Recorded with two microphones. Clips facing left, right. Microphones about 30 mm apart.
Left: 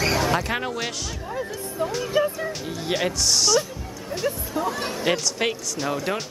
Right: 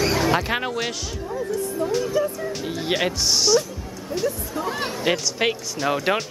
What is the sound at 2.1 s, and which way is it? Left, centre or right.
Speech, left.